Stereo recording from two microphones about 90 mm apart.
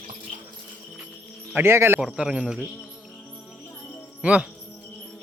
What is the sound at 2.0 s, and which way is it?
Speech, 10° right (ahead or behind).